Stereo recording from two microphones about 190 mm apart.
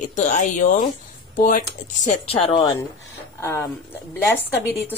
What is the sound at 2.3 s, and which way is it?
Speech, 30° left (ahead or behind).